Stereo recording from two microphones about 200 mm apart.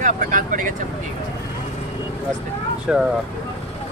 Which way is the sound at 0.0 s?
40° right (ahead or behind).